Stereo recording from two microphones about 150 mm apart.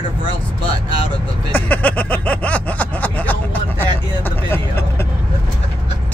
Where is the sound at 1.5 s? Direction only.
10° left (ahead or behind).